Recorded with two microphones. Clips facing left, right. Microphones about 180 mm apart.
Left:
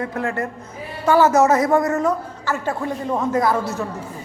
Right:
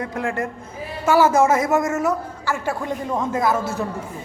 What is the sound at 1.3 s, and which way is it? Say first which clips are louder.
Speech: left 2 dB; 25° right (ahead or behind).